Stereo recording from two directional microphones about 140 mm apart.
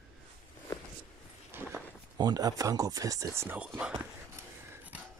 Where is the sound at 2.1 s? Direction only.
30° right (ahead or behind).